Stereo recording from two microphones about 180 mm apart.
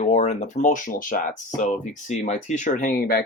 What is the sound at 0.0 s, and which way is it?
Speech, 40° left (ahead or behind).